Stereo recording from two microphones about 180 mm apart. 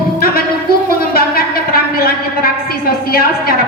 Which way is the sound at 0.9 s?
55° left (ahead or behind).